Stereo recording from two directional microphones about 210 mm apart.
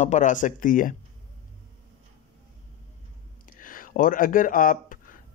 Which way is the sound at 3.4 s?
40° left (ahead or behind).